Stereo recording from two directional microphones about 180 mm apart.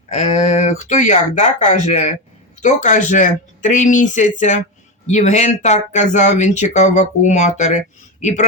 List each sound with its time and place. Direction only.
0.1 s speech: 40° left (ahead or behind)